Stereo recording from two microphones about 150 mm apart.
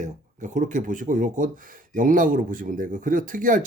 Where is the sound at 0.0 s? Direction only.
55° right (ahead or behind).